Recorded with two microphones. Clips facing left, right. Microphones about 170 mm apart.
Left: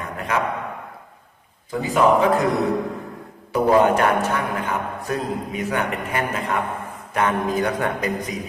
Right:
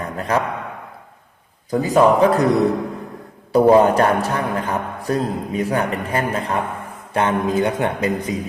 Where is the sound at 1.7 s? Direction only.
40° right (ahead or behind).